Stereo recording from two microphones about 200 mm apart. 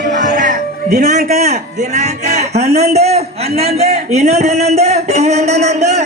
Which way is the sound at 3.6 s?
30° right (ahead or behind).